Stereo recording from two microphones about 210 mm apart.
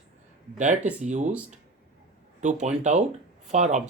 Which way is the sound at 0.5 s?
35° right (ahead or behind).